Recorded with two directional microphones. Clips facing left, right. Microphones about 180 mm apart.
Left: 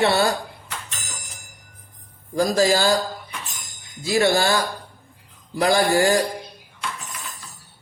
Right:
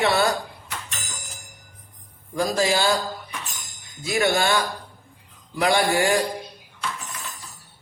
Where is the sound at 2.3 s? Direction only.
40° left (ahead or behind).